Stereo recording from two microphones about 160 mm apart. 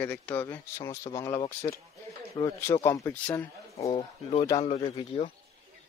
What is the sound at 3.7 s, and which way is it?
Speech, 40° left (ahead or behind).